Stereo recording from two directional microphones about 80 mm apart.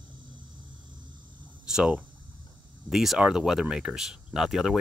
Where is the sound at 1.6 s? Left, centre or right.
Centre.